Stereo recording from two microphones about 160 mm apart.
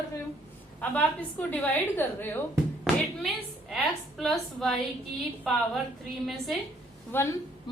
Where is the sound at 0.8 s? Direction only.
10° left (ahead or behind).